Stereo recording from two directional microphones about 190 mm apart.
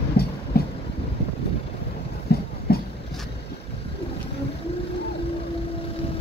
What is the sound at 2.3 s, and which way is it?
Clip-clop, 55° left (ahead or behind).